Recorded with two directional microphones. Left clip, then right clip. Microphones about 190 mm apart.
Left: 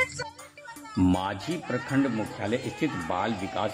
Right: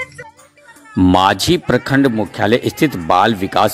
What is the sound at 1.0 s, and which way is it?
Speech, 45° right (ahead or behind).